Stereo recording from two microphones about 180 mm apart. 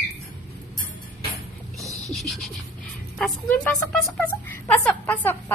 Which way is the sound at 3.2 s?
5° left (ahead or behind).